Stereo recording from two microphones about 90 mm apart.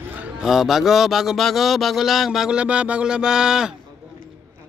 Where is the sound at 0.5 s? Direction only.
5° right (ahead or behind).